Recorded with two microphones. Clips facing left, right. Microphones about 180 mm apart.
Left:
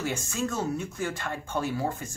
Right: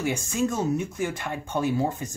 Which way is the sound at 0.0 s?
15° right (ahead or behind).